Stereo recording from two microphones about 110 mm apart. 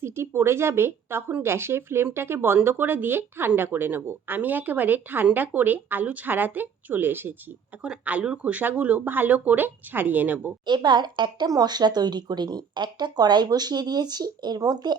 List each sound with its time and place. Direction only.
0.0 s speech: 25° right (ahead or behind)
10.7 s speech: 45° right (ahead or behind)